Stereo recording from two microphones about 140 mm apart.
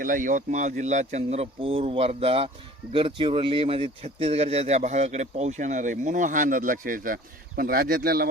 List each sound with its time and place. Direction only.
0.0 s speech: 70° right (ahead or behind); by 8.3 s 90° right